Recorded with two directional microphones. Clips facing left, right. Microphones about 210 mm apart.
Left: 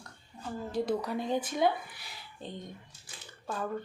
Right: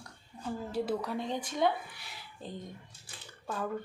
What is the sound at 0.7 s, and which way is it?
Speech, 5° right (ahead or behind).